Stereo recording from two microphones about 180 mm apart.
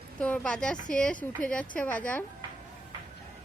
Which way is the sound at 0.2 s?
10° left (ahead or behind).